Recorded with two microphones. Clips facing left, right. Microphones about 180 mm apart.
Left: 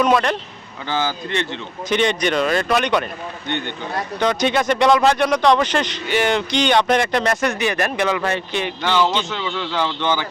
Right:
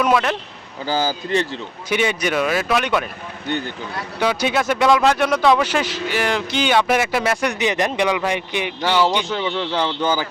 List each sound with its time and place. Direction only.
0.0 s speech: 5° right (ahead or behind)
0.9 s speech: 35° right (ahead or behind)
1.9 s speech: 5° right (ahead or behind)
4.2 s speech: 5° right (ahead or behind)
7.6 s speech: 20° right (ahead or behind)
9.3 s speech: 25° right (ahead or behind)